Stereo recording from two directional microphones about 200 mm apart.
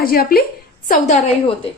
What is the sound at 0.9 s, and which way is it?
Speech, 35° left (ahead or behind).